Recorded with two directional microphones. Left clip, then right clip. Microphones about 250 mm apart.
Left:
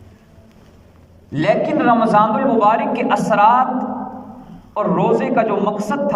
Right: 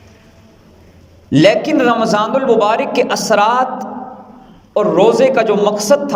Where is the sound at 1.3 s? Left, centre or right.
Right.